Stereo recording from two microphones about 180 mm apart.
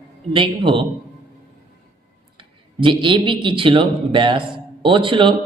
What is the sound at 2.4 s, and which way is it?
Speech, 25° right (ahead or behind).